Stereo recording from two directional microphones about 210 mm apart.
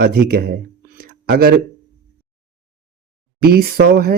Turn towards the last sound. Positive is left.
turn(degrees=-45)  # may be behind; listen again after turning